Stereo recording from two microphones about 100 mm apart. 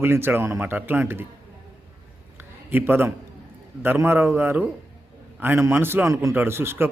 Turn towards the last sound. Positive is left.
turn(degrees=-25)  # may be behind; listen again after turning